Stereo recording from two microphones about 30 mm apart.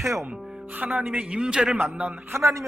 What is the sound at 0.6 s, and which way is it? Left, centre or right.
Speech, right.